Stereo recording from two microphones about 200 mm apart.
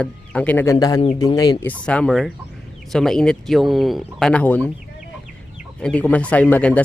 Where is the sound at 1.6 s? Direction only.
5° left (ahead or behind).